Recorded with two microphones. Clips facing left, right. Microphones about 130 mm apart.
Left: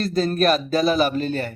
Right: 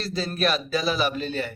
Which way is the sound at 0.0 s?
50° left (ahead or behind).